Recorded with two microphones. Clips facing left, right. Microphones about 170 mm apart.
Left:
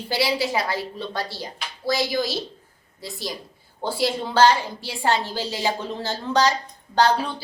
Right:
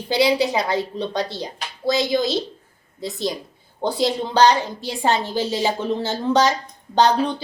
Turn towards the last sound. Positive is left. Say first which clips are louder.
# right 3 dB
turn(degrees=-20)  # may be behind; listen again after turning